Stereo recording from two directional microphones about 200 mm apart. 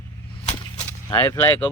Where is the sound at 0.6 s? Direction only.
10° left (ahead or behind).